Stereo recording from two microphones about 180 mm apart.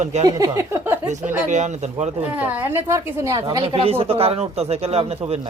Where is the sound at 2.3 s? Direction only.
10° right (ahead or behind); by 5.5 s 35° right (ahead or behind).